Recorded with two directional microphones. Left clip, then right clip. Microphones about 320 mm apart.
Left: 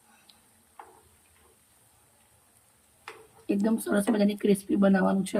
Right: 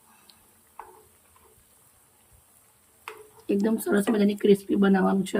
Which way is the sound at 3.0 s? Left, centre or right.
Centre.